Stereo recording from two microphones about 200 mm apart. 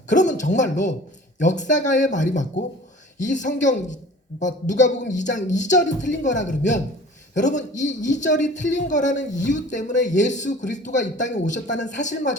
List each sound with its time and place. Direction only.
0.1 s a man's voice: 40° left (ahead or behind)